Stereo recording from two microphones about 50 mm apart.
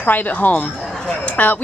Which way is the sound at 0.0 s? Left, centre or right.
Left.